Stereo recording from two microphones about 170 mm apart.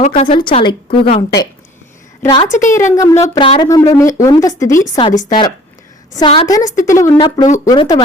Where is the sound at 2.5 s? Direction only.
45° left (ahead or behind).